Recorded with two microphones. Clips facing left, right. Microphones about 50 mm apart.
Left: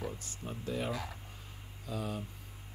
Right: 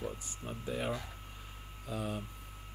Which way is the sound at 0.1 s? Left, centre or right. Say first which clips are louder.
Even; centre.